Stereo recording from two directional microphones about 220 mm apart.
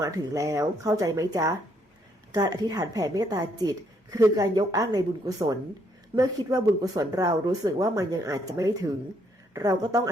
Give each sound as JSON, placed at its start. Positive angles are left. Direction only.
{"t": 0.0, "sound": "a woman's voice", "side_deg": -15}